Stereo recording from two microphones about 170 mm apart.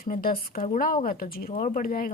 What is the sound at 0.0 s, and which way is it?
A woman's voice, 60° left (ahead or behind).